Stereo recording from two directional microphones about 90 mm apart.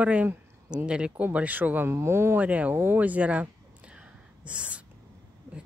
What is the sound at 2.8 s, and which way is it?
Gasp, 20° right (ahead or behind).